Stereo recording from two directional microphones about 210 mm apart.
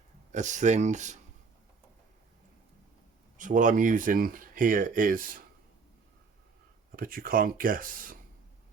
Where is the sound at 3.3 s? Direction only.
35° right (ahead or behind).